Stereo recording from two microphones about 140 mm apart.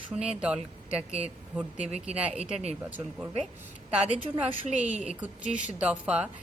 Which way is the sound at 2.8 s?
10° right (ahead or behind).